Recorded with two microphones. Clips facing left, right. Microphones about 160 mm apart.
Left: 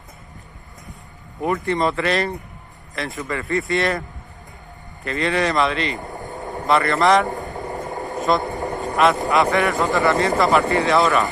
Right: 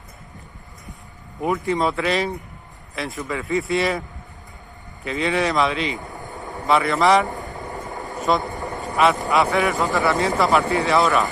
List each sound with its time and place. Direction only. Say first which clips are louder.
1.4 s speech: left 1 dB; centre (ahead or behind)
5.0 s speech: left 1 dB; centre (ahead or behind)
6.1 s vehicle: left 3 dB; 20° left (ahead or behind)
6.6 s speech: even; centre (ahead or behind)
7.5 s sewing machine: left 4 dB; 20° left (ahead or behind)
8.5 s vehicle: left 4 dB; 20° left (ahead or behind)
8.9 s speech: left 1 dB; centre (ahead or behind)